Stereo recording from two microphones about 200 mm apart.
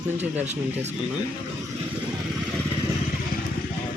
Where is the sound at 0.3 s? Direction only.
35° right (ahead or behind).